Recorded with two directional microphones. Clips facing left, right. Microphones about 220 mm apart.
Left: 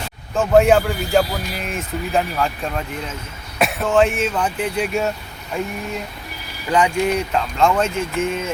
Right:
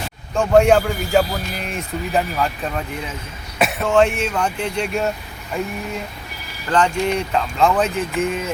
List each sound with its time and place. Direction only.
0.3 s a man's voice: centre (ahead or behind)
6.7 s a man's voice: 10° left (ahead or behind)